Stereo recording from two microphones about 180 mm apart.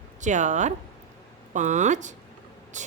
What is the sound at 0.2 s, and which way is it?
A woman's voice, 40° right (ahead or behind).